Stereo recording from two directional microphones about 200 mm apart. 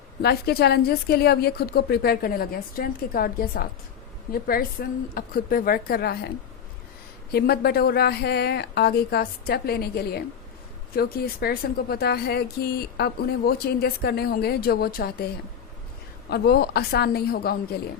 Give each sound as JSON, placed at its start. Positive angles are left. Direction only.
{"t": 0.2, "sound": "speech", "side_deg": 55}
{"t": 7.3, "sound": "speech", "side_deg": 50}
{"t": 16.3, "sound": "speech", "side_deg": 50}